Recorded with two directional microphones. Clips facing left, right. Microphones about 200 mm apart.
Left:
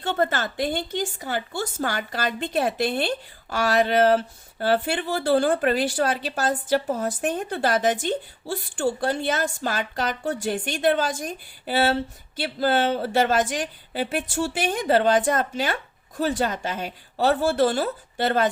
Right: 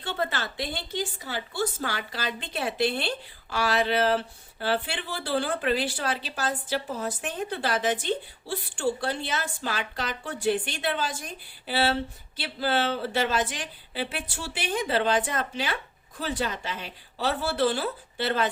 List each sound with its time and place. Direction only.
0.0 s speech: 50° left (ahead or behind)